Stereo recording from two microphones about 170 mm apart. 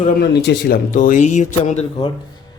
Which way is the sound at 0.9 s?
50° left (ahead or behind).